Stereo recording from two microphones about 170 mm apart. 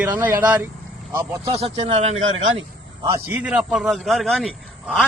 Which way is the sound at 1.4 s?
35° right (ahead or behind).